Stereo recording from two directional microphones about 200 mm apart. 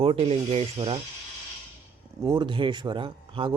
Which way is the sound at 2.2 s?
20° right (ahead or behind).